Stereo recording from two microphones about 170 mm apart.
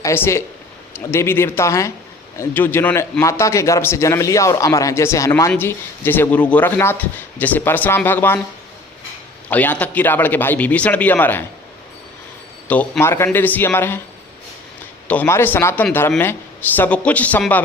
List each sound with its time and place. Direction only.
0.0 s a man's voice: 15° left (ahead or behind)
9.5 s a man's voice: 10° left (ahead or behind)
12.6 s a man's voice: 10° left (ahead or behind)
15.0 s a man's voice: 10° left (ahead or behind)